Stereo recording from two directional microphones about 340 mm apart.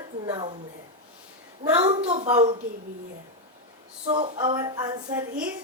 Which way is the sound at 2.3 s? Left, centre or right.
Centre.